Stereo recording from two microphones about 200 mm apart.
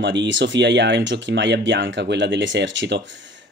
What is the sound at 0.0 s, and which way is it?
Speech, 60° right (ahead or behind).